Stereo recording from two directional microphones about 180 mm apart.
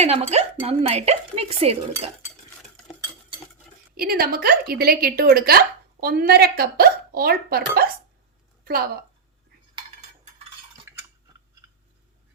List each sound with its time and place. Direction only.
0.0 s speech: 35° right (ahead or behind)
3.9 s a woman's voice: 60° right (ahead or behind)